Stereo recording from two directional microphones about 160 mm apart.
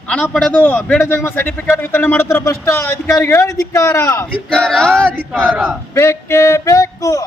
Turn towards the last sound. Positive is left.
turn(degrees=20)  # may be behind; listen again after turning